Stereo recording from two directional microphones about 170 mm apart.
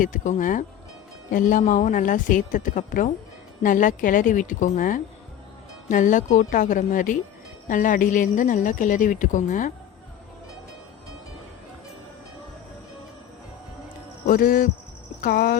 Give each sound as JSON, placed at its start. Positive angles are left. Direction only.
{"t": 0.0, "sound": "speech", "side_deg": 50}
{"t": 14.3, "sound": "speech", "side_deg": 55}